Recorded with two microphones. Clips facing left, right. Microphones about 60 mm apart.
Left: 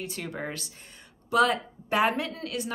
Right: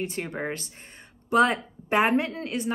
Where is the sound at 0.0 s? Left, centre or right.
Right.